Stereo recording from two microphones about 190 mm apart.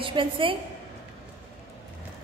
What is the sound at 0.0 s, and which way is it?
Speech, 25° right (ahead or behind).